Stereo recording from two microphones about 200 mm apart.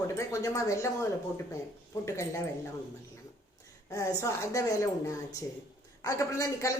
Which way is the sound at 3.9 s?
15° left (ahead or behind).